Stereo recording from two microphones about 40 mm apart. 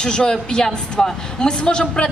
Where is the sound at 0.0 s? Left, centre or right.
Left.